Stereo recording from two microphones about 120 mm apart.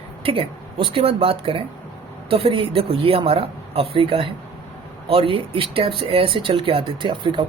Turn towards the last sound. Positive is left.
turn(degrees=-45)  # may be behind; listen again after turning